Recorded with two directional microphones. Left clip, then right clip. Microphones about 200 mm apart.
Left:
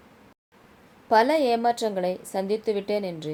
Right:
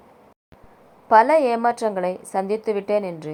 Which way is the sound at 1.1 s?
10° right (ahead or behind).